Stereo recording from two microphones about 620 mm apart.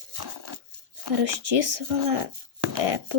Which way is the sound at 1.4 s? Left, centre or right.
Right.